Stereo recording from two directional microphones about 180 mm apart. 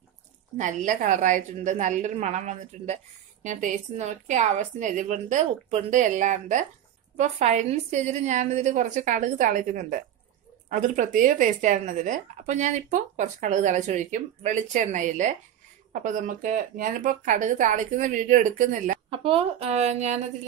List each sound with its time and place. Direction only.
0.6 s a woman's voice: 45° right (ahead or behind)
19.0 s a woman's voice: 30° right (ahead or behind)